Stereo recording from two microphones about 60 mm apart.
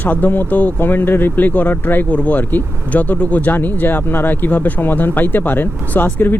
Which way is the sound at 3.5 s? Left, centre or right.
Left.